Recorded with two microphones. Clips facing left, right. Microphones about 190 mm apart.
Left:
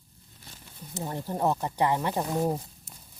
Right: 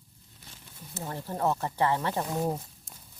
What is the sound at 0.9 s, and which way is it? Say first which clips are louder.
Speech: left 3 dB; 15° left (ahead or behind).